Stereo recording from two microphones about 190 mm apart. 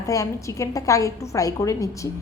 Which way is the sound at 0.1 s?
15° left (ahead or behind).